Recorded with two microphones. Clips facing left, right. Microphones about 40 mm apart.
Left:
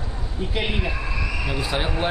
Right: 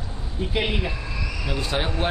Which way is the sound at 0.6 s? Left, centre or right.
Centre.